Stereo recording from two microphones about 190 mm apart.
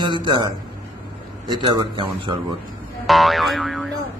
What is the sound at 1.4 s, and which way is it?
Speech, 25° right (ahead or behind).